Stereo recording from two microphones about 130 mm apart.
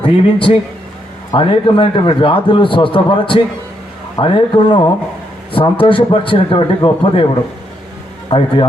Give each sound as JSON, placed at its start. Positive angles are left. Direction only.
{"t": 0.0, "sound": "a man's voice", "side_deg": 45}
{"t": 8.3, "sound": "a man's voice", "side_deg": 40}